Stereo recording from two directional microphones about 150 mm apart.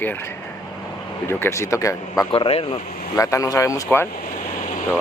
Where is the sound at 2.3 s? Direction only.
40° left (ahead or behind).